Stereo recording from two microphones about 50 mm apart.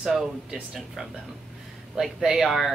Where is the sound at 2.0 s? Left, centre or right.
Centre.